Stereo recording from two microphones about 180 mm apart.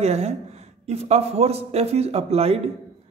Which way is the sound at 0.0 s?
35° right (ahead or behind).